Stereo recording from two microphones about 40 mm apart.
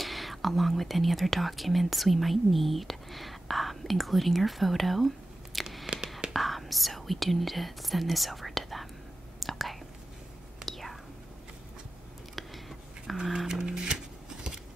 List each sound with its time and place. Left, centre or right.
0.0 s speech: centre
9.4 s whispering: centre
12.4 s a sound: centre
13.5 s music: centre